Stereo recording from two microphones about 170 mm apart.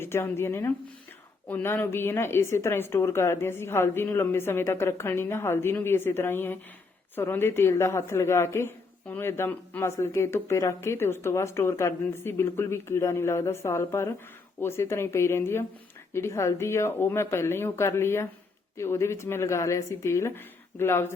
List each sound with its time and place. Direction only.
0.0 s speech: 15° left (ahead or behind)